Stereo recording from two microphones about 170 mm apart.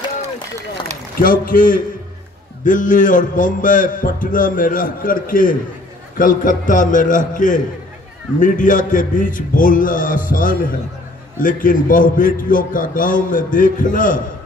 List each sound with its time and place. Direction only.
1.2 s a man's voice: 55° left (ahead or behind)